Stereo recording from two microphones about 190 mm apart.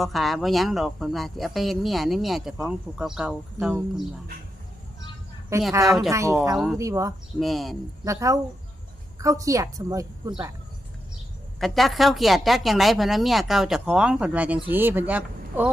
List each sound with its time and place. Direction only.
0.0 s a woman's voice: centre (ahead or behind)
5.7 s a woman's voice: 15° right (ahead or behind)
7.3 s a woman's voice: centre (ahead or behind)
8.0 s a woman's voice: 15° right (ahead or behind)
11.6 s a woman's voice: centre (ahead or behind)